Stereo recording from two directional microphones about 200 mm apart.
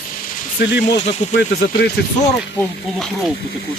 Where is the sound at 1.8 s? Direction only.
50° left (ahead or behind).